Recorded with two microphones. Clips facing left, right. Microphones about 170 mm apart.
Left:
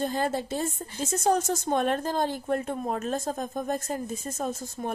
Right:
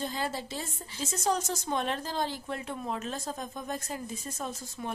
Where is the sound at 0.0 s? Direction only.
50° left (ahead or behind).